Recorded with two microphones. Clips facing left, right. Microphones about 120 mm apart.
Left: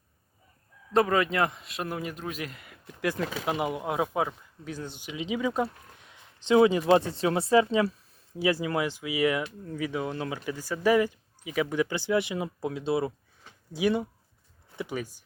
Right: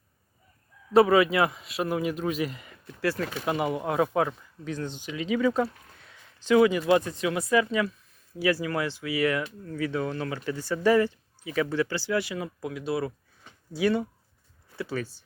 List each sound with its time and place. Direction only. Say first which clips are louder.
0.9 s a man's voice: right 4 dB; 5° right (ahead or behind)
2.8 s speech: right 1 dB; 15° left (ahead or behind)